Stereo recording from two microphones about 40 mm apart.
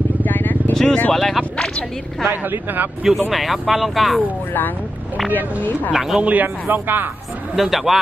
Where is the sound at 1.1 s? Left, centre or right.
Centre.